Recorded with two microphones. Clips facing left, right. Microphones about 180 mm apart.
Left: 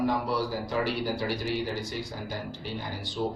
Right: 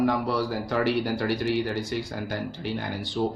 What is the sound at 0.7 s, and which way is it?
Speech, 65° right (ahead or behind).